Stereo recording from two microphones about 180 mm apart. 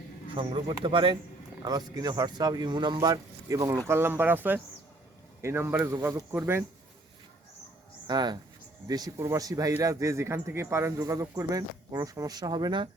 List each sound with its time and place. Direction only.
0.3 s a man's voice: 25° right (ahead or behind); by 6.7 s 10° right (ahead or behind)
8.0 s a man's voice: 25° right (ahead or behind)